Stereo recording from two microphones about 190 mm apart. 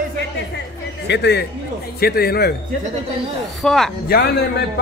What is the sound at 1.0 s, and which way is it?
A man's voice, 65° left (ahead or behind).